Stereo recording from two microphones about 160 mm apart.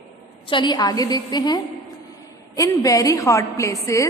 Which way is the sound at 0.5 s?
25° left (ahead or behind).